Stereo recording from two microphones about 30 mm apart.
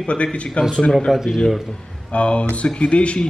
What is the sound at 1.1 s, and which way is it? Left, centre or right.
Speech, centre.